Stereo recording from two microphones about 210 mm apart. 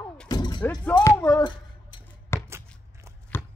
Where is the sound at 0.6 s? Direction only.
5° left (ahead or behind).